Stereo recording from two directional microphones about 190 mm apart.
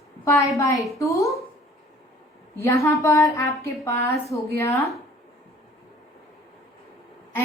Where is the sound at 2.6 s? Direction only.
15° left (ahead or behind).